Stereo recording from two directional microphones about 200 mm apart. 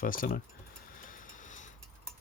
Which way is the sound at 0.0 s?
45° left (ahead or behind).